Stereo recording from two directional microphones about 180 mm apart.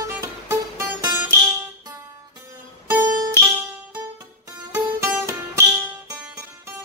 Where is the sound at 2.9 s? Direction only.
20° right (ahead or behind).